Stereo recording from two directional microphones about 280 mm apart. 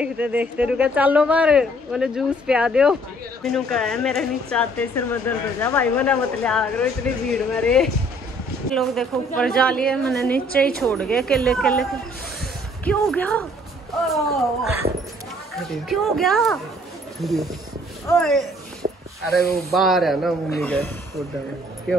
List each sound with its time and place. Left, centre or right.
0.0 s speech: centre
10.3 s a woman's voice: left
10.8 s speech: centre
18.8 s a sound: right
19.5 s speech: centre